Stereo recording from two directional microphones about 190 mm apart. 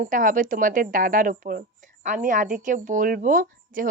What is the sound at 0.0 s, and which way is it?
Speech, 45° right (ahead or behind).